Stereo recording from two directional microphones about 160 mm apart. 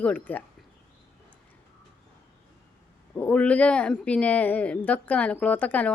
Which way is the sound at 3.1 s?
10° left (ahead or behind).